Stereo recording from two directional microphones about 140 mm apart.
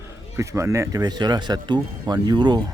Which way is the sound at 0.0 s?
20° right (ahead or behind).